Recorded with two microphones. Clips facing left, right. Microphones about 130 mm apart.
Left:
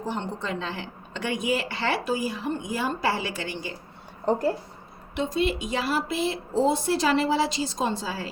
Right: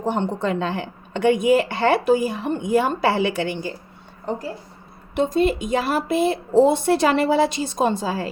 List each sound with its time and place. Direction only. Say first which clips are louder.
0.0 s a woman's voice: right 8 dB; 55° right (ahead or behind)
5.1 s a woman's voice: right 6 dB; 50° right (ahead or behind)